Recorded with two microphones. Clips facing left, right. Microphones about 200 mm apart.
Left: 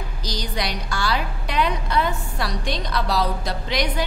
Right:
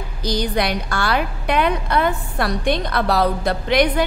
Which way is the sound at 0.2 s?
55° right (ahead or behind).